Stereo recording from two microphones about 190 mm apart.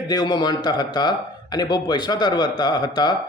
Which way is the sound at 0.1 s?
20° left (ahead or behind).